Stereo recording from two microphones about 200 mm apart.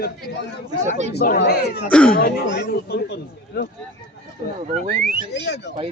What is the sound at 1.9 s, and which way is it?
Speech, 5° left (ahead or behind).